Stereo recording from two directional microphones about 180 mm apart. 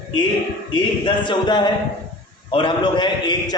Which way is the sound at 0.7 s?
25° left (ahead or behind).